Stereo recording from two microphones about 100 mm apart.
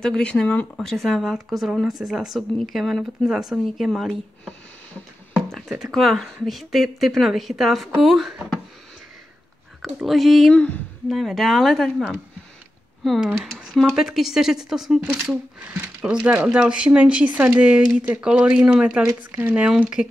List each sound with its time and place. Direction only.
0.0 s speech: 10° left (ahead or behind)
5.5 s speech: centre (ahead or behind)
9.9 s speech: centre (ahead or behind)
10.5 s speech: 10° left (ahead or behind)
11.1 s speech: centre (ahead or behind)
15.2 s speech: 15° right (ahead or behind)